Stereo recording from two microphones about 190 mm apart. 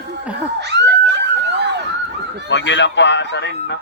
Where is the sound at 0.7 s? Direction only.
65° right (ahead or behind).